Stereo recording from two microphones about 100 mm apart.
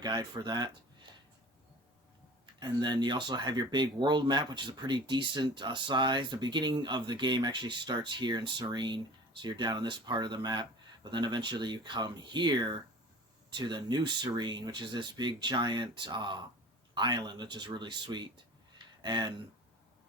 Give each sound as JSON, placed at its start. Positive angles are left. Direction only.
{"t": 0.0, "sound": "speech", "side_deg": -45}
{"t": 2.6, "sound": "speech", "side_deg": -45}